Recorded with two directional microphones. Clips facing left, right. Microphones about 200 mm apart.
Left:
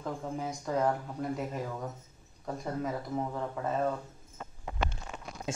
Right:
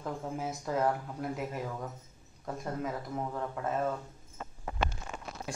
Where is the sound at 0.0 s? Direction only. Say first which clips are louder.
Even; 5° right (ahead or behind).